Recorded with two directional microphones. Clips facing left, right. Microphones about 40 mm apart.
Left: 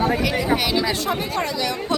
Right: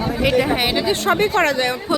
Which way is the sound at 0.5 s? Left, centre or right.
Right.